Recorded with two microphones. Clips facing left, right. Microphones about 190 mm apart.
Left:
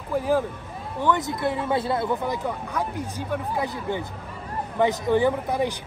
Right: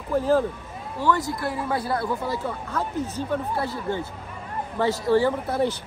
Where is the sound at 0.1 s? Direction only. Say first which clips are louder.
Right 2 dB; 10° left (ahead or behind).